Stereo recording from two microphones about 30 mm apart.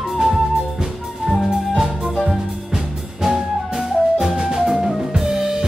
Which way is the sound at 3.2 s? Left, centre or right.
Centre.